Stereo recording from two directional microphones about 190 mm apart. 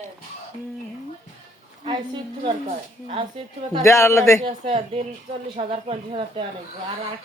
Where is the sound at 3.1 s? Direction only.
25° right (ahead or behind).